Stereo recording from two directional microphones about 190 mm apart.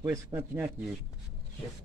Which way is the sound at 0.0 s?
15° right (ahead or behind).